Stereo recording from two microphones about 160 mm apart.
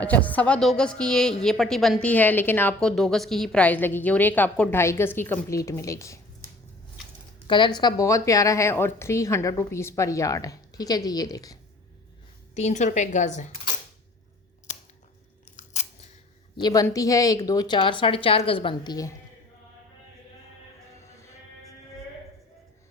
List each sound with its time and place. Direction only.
0.0 s a woman's voice: 10° left (ahead or behind)
7.4 s a woman's voice: 30° left (ahead or behind)
12.5 s a woman's voice: 45° left (ahead or behind)
15.5 s chewing: 45° left (ahead or behind)
16.6 s a woman's voice: 25° left (ahead or behind)